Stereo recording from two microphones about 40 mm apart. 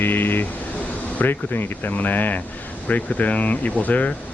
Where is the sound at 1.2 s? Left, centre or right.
Left.